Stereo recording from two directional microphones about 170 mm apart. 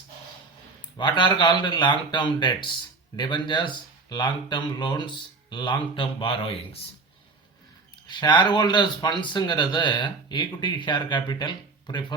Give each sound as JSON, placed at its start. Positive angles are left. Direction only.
{"t": 0.8, "sound": "a man's voice", "side_deg": 30}
{"t": 8.0, "sound": "a man's voice", "side_deg": 25}